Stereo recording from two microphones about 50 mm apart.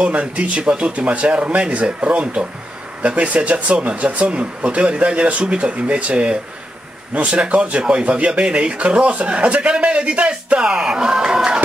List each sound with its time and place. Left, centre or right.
0.0 s a man's voice: right